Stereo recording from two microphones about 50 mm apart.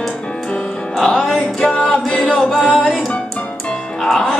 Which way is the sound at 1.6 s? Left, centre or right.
Left.